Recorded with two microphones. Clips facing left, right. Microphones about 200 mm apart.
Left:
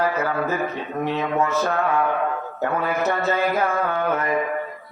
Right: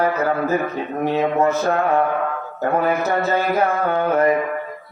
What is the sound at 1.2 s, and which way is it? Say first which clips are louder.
Speech: right 5 dB; 35° right (ahead or behind).